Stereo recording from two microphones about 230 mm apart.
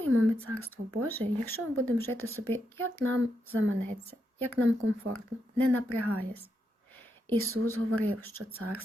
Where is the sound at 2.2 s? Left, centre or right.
Right.